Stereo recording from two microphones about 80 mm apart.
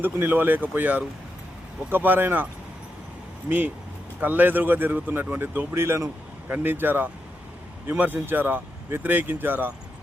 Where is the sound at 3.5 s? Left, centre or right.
Right.